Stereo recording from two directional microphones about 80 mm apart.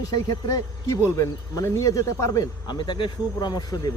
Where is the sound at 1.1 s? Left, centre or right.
Left.